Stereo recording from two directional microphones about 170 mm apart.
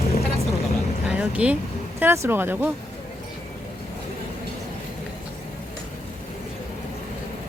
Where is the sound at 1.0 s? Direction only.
5° right (ahead or behind).